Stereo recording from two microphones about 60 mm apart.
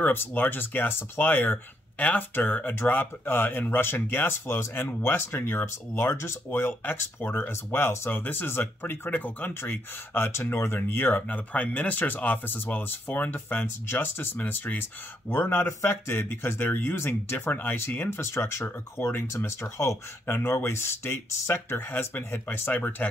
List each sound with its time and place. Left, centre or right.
0.0 s speech: left
20.2 s speech: left